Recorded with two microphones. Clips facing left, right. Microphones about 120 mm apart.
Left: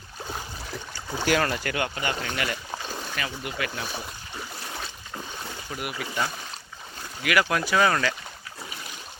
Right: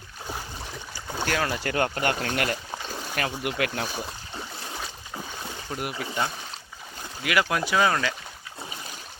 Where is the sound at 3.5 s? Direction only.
70° right (ahead or behind).